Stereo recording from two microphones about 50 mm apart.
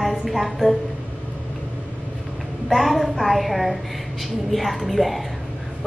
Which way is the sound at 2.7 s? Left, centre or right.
Centre.